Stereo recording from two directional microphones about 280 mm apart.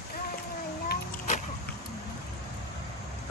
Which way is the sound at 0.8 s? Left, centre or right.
Left.